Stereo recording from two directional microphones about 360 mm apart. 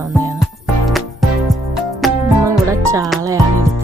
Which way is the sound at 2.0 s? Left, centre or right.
Centre.